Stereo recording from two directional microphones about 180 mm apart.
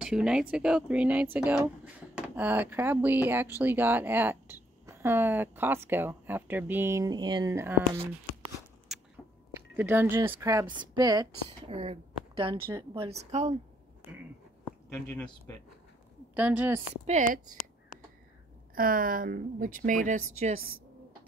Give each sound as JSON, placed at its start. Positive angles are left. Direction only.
{"t": 0.0, "sound": "speech", "side_deg": -5}
{"t": 9.8, "sound": "speech", "side_deg": -10}
{"t": 15.0, "sound": "speech", "side_deg": 5}
{"t": 16.3, "sound": "speech", "side_deg": -10}
{"t": 16.9, "sound": "speech", "side_deg": -40}
{"t": 18.8, "sound": "speech", "side_deg": -50}